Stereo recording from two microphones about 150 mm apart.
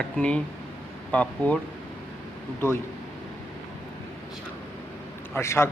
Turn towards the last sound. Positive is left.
turn(degrees=15)  # may be behind; listen again after turning